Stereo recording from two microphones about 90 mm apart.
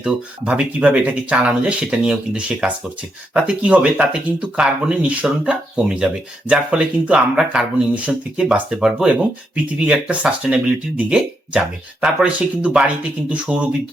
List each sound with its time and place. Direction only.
0.0 s speech: 10° right (ahead or behind)